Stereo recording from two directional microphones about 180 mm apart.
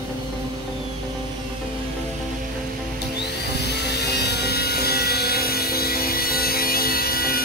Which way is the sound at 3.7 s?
65° left (ahead or behind).